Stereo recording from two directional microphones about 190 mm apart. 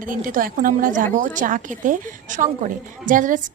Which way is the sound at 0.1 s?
45° right (ahead or behind).